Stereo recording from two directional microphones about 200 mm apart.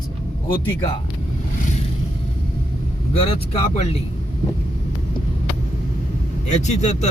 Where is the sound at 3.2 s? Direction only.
30° left (ahead or behind).